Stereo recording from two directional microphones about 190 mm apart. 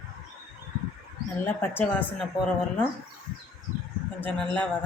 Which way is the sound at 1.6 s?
10° left (ahead or behind).